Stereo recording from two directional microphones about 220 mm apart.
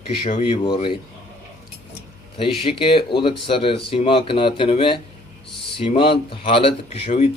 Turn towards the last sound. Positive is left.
turn(degrees=30)  # may be behind; listen again after turning